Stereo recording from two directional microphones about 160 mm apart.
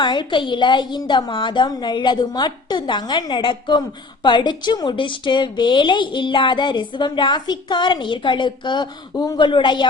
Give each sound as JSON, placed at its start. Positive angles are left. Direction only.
{"t": 0.0, "sound": "a woman's voice", "side_deg": 30}